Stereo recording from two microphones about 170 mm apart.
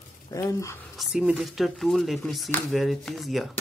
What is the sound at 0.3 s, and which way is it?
Speech, 20° left (ahead or behind).